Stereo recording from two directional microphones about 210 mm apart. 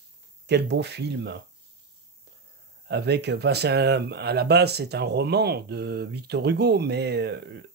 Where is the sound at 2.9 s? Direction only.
50° right (ahead or behind).